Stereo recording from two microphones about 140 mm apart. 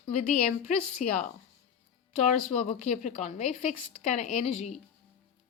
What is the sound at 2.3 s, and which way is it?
A woman's voice, 50° left (ahead or behind).